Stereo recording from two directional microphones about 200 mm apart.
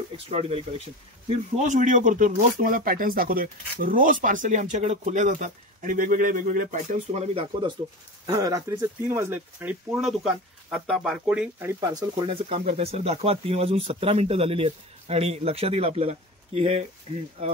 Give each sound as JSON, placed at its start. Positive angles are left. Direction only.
{"t": 0.3, "sound": "speech", "side_deg": -30}
{"t": 8.3, "sound": "speech", "side_deg": -15}